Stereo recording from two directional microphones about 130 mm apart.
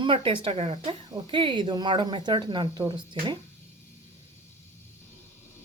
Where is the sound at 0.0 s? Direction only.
40° right (ahead or behind).